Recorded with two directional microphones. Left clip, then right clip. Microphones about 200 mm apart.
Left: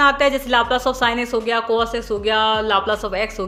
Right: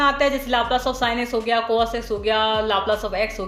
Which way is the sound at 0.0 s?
30° left (ahead or behind).